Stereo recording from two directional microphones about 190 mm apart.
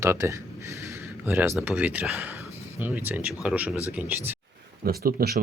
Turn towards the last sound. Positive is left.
turn(degrees=-55)  # may be behind; listen again after turning